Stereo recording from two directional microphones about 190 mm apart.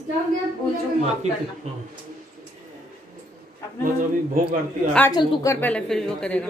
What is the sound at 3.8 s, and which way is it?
Speech, 45° right (ahead or behind).